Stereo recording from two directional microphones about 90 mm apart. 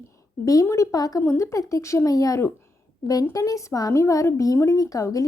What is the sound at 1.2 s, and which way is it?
Speech, 30° left (ahead or behind).